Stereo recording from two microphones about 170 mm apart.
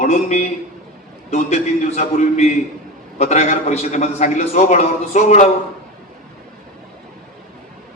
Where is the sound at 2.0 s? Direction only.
40° left (ahead or behind).